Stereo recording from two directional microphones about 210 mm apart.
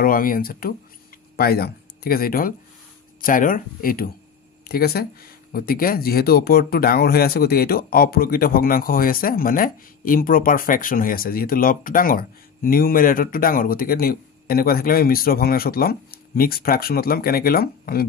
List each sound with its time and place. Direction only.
0.0 s speech: 40° left (ahead or behind)